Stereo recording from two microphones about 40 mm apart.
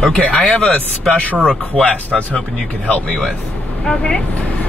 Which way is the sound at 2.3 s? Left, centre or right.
Left.